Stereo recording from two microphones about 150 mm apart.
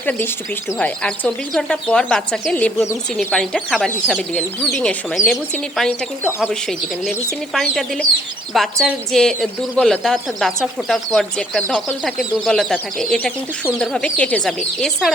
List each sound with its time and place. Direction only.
0.0 s speech: 10° left (ahead or behind)